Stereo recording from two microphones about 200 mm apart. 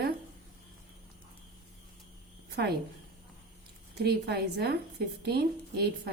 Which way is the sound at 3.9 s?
55° right (ahead or behind).